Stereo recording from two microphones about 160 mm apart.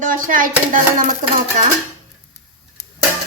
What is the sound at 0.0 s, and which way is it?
Speech, 55° right (ahead or behind).